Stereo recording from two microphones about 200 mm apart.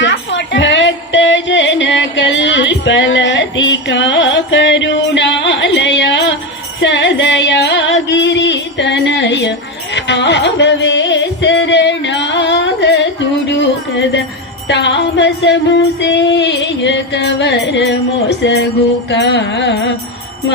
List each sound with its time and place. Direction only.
0.0 s music: 65° left (ahead or behind)
5.5 s a sound: 65° left (ahead or behind)
6.7 s music: 65° left (ahead or behind)